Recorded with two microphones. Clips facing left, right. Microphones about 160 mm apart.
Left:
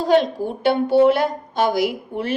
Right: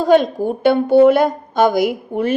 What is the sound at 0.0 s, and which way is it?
A woman's voice, 50° right (ahead or behind).